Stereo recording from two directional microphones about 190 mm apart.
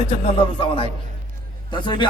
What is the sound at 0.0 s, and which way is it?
A man's voice, 30° left (ahead or behind).